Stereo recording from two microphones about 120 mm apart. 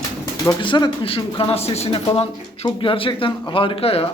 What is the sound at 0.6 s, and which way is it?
A man's voice, 40° left (ahead or behind).